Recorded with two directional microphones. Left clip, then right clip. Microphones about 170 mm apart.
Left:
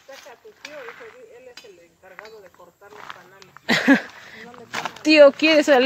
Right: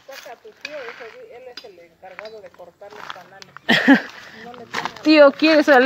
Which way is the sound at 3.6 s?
15° left (ahead or behind).